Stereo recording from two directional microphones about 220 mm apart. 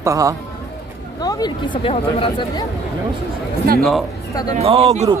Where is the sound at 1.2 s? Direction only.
15° left (ahead or behind).